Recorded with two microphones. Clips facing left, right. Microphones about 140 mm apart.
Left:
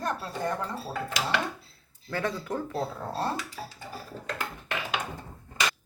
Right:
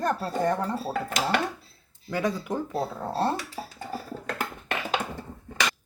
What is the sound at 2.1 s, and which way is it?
Speech, 15° right (ahead or behind).